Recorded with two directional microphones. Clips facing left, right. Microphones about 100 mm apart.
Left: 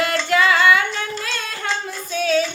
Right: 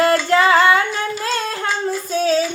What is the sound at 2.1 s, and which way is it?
Child singing, 35° right (ahead or behind).